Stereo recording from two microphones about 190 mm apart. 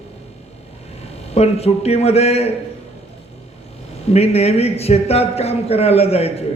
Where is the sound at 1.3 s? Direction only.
35° left (ahead or behind).